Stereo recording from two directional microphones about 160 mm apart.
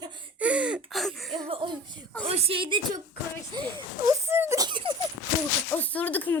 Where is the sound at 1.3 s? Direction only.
30° right (ahead or behind).